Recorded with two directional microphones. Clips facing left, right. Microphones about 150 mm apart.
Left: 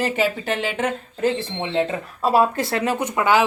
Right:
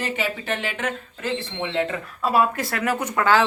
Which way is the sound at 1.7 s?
30° left (ahead or behind).